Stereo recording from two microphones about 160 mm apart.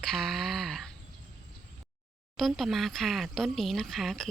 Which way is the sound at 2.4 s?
Centre (ahead or behind).